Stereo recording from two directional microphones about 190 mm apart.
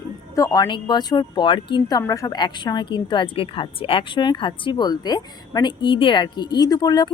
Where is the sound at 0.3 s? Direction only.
20° left (ahead or behind).